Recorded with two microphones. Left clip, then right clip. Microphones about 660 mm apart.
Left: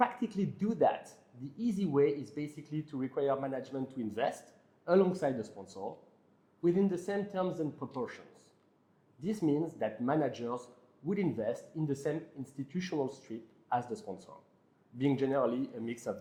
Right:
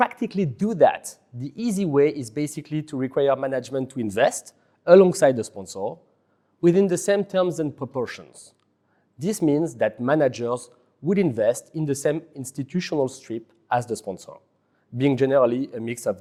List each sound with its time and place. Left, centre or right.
0.0 s speech: right